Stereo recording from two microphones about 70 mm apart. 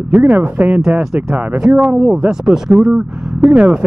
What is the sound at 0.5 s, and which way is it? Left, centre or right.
Speech, right.